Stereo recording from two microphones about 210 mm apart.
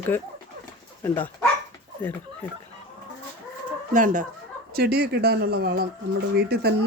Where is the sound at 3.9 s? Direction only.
40° right (ahead or behind).